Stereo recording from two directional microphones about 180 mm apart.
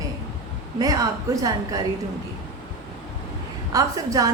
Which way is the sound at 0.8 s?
20° right (ahead or behind).